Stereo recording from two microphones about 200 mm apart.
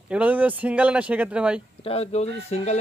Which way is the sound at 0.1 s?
5° right (ahead or behind).